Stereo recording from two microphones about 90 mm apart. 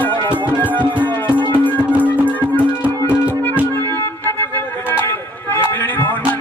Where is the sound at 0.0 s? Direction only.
20° left (ahead or behind).